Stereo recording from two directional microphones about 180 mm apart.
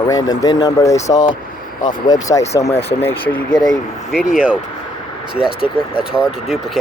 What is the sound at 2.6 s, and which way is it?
Speech, 35° left (ahead or behind).